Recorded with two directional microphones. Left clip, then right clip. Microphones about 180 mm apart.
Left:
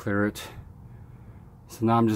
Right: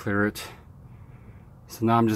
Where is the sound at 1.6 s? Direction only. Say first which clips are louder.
Right 1 dB; 15° right (ahead or behind).